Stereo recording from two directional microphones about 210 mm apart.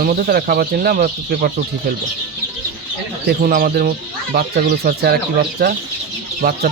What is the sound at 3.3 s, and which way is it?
Speech, 45° right (ahead or behind).